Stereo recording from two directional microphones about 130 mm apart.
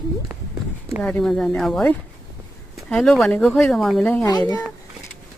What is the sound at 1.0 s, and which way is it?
Speech, 5° left (ahead or behind).